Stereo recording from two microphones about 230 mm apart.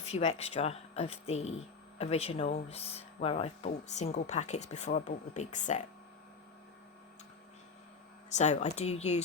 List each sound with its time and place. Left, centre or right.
0.0 s speech: left
8.3 s speech: left